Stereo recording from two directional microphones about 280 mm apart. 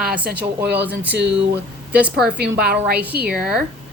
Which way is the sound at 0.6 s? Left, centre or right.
Right.